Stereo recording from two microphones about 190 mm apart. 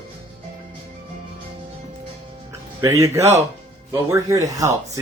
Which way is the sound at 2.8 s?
15° right (ahead or behind).